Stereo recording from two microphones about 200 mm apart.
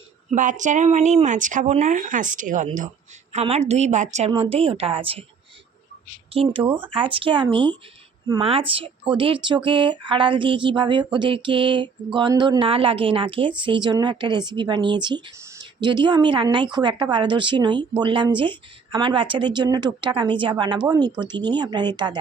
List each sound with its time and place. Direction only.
0.3 s speech: 40° right (ahead or behind)
6.3 s speech: 30° right (ahead or behind)
6.6 s speech: 10° right (ahead or behind)
7.1 s speech: 25° right (ahead or behind)